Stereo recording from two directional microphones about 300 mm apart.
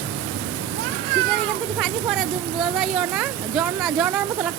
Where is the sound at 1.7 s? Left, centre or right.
Centre.